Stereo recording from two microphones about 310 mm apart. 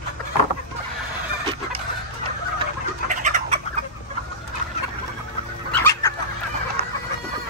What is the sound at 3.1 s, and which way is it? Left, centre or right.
Bird, right.